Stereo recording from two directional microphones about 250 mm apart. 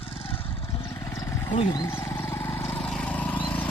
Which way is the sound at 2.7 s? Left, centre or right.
Centre.